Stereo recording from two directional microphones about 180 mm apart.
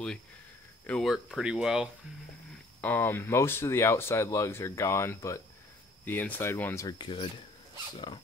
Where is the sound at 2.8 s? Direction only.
10° left (ahead or behind); by 8.2 s 25° left (ahead or behind).